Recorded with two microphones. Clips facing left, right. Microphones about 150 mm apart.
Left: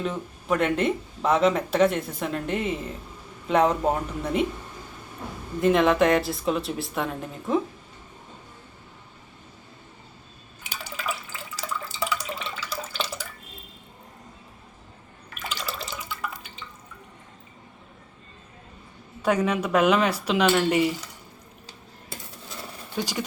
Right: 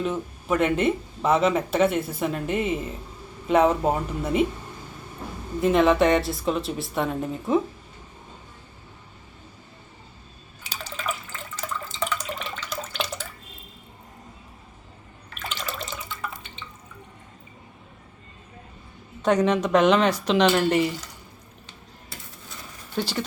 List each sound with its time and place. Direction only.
0.0 s speech: centre (ahead or behind)
5.5 s speech: centre (ahead or behind)
10.8 s water: 5° left (ahead or behind)
11.9 s drip: 5° left (ahead or behind)
15.4 s drip: 5° left (ahead or behind)
19.2 s speech: 10° left (ahead or behind)
23.0 s speech: 15° left (ahead or behind)